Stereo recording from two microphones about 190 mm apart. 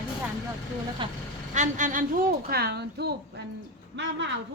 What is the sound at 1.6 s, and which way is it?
Vehicle, 40° right (ahead or behind).